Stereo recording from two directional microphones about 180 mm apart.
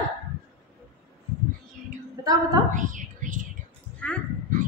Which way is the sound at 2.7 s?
45° right (ahead or behind).